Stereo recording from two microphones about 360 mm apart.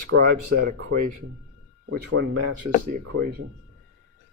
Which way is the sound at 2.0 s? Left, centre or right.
Right.